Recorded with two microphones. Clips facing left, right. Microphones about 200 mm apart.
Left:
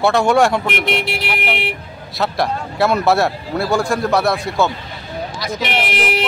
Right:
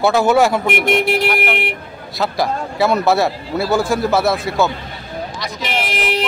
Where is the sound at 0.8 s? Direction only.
50° right (ahead or behind).